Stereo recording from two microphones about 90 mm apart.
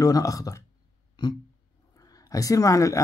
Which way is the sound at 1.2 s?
55° left (ahead or behind).